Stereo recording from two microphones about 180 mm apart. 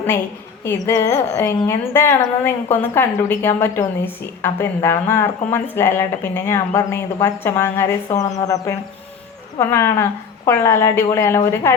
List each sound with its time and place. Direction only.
0.6 s a woman's voice: 15° left (ahead or behind)